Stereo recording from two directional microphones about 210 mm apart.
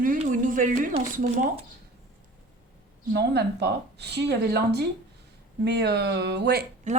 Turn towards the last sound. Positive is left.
turn(degrees=-35)  # may be behind; listen again after turning